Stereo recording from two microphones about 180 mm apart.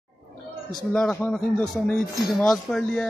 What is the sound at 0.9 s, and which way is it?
Speech, 5° left (ahead or behind).